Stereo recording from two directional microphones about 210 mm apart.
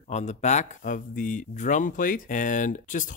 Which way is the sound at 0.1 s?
35° left (ahead or behind).